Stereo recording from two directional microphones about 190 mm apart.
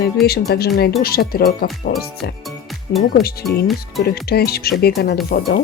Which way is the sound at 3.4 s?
Centre (ahead or behind).